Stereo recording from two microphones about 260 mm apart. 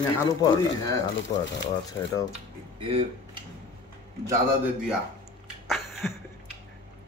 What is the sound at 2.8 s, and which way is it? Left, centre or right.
Speech, right.